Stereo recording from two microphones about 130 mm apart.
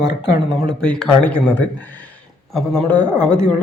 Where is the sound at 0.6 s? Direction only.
5° left (ahead or behind).